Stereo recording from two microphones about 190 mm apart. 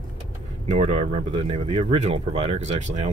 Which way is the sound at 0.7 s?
35° right (ahead or behind).